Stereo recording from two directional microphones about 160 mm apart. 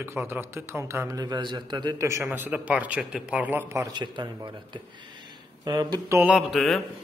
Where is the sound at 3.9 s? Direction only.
30° right (ahead or behind).